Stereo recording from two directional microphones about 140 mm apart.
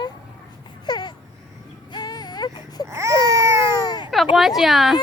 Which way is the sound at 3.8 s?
30° left (ahead or behind).